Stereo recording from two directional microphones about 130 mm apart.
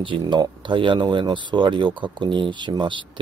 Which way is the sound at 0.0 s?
40° right (ahead or behind).